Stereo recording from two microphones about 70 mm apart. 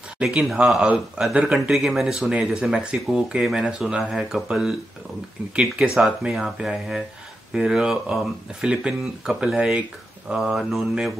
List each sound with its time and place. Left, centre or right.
0.2 s speech: centre